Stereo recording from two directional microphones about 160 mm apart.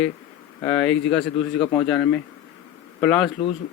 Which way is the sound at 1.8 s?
5° left (ahead or behind).